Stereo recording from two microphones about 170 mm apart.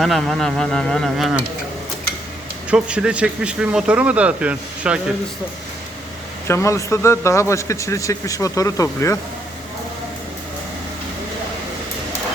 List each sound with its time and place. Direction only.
0.0 s speech: centre (ahead or behind)
2.6 s speech: 5° right (ahead or behind)
6.5 s speech: 15° left (ahead or behind)